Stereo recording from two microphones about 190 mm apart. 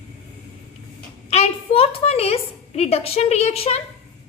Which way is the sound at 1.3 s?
30° left (ahead or behind).